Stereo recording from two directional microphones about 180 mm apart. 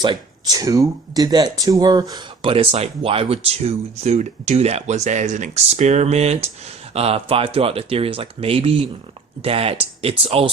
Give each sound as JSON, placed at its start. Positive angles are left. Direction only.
{"t": 0.0, "sound": "speech", "side_deg": -25}